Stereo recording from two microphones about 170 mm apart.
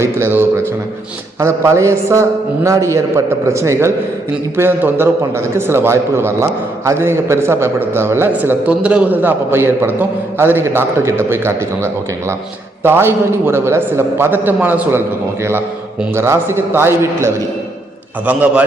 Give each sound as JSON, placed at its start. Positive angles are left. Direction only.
{"t": 0.0, "sound": "a man's voice", "side_deg": -15}